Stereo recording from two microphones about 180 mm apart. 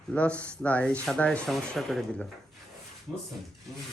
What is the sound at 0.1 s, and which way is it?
Speech, 10° left (ahead or behind).